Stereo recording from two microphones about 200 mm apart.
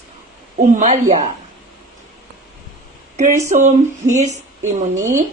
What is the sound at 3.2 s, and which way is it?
A man's voice, 35° right (ahead or behind).